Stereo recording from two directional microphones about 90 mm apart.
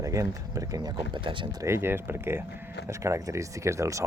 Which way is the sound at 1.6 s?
30° right (ahead or behind).